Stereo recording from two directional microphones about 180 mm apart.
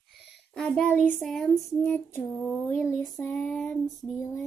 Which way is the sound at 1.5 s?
15° left (ahead or behind).